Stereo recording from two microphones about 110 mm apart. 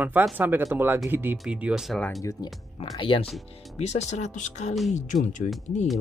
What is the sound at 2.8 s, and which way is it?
Speech, 55° left (ahead or behind).